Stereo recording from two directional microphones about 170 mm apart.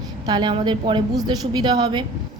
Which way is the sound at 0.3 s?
25° right (ahead or behind).